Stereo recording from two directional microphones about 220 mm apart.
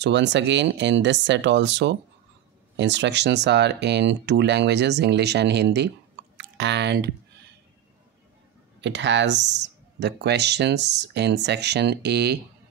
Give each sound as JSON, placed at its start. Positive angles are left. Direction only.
{"t": 0.0, "sound": "speech", "side_deg": -50}
{"t": 8.8, "sound": "speech", "side_deg": -55}